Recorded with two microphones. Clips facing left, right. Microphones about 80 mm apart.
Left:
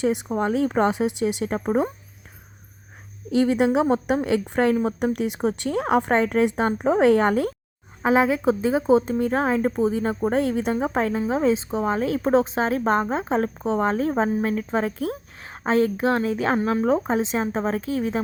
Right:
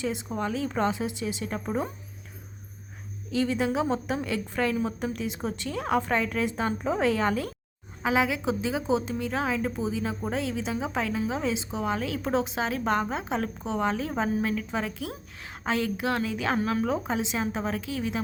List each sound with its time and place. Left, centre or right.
0.0 s a woman's voice: left
3.2 s a woman's voice: left
8.0 s a woman's voice: left